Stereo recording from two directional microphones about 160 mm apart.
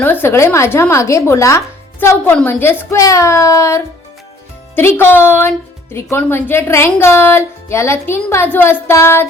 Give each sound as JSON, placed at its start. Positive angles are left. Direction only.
{"t": 0.0, "sound": "speech", "side_deg": 15}